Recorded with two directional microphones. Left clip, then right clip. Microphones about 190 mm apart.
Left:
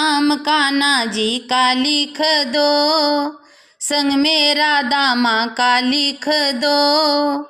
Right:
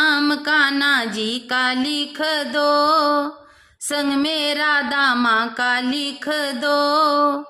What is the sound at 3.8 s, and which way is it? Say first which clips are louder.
Mantra: left 4 dB; 10° left (ahead or behind).